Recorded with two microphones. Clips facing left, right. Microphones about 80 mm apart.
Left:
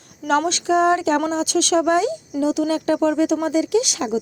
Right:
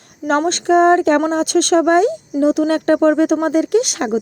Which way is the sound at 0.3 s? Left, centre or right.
Right.